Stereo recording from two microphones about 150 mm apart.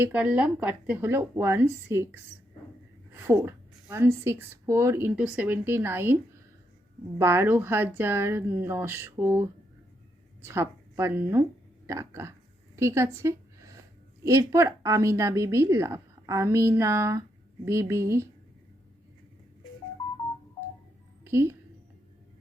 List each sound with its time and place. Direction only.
0.0 s a woman's voice: 10° right (ahead or behind)
7.2 s a woman's voice: 15° right (ahead or behind)
12.7 s a sound: 20° right (ahead or behind)
14.3 s a woman's voice: 20° right (ahead or behind)
21.2 s a woman's voice: 15° right (ahead or behind)